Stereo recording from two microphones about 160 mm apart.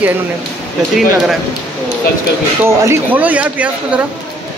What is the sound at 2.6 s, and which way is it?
Speech, 15° right (ahead or behind).